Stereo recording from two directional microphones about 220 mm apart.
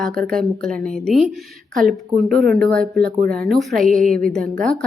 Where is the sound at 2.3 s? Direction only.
45° right (ahead or behind).